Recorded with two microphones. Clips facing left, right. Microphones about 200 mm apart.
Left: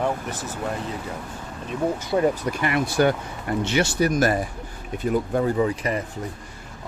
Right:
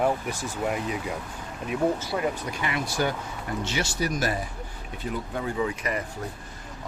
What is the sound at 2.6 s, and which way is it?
Speech, 55° left (ahead or behind).